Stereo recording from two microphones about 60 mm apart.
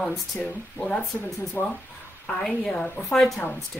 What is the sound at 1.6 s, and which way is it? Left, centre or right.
Speech, left.